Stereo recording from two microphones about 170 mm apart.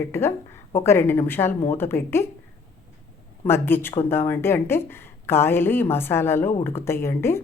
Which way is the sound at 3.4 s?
15° left (ahead or behind).